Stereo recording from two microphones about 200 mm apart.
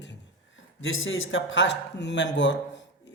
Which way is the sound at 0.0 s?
65° left (ahead or behind).